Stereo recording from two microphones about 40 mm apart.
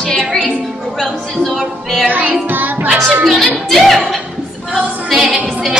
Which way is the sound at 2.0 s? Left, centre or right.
Right.